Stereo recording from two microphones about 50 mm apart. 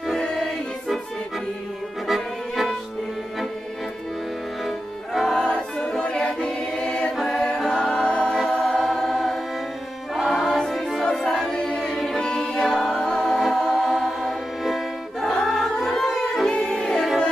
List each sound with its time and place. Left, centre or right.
0.2 s music: centre
2.0 s music: centre
4.6 s music: centre
5.4 s choir: centre
8.4 s choir: centre
10.1 s music: centre
11.5 s choir: centre
12.2 s music: centre
13.3 s music: centre